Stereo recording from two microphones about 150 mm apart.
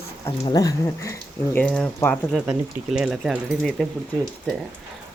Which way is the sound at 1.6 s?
10° left (ahead or behind).